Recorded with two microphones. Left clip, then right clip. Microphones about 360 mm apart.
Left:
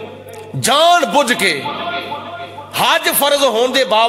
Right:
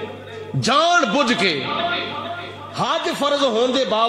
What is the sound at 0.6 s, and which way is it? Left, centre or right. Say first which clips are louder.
Speech: left 5 dB; left.